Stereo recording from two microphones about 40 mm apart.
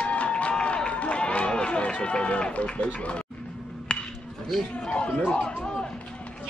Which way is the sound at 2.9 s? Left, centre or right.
Left.